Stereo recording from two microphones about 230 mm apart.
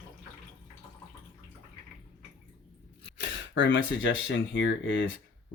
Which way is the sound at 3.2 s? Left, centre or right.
Left.